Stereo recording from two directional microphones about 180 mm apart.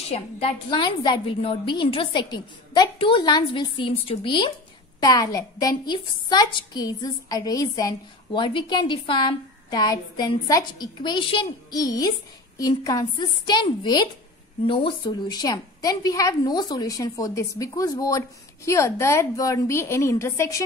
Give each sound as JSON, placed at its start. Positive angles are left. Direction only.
{"t": 0.1, "sound": "a woman's voice", "side_deg": 30}